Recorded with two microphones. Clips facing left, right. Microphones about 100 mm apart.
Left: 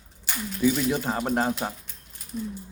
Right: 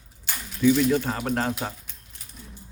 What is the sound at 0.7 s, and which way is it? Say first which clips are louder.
Speech: right 3 dB; 15° left (ahead or behind).